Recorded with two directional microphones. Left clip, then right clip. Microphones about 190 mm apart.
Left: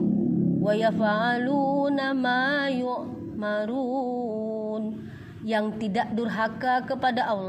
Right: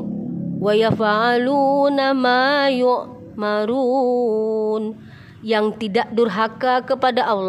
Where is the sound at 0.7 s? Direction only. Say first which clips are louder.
Right 8 dB; 35° right (ahead or behind).